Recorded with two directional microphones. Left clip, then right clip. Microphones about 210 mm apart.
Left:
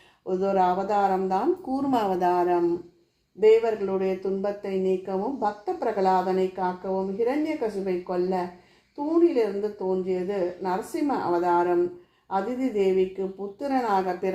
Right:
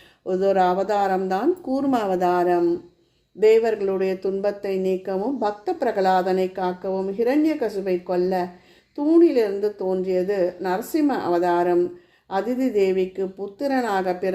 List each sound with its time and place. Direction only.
0.3 s speech: 40° right (ahead or behind)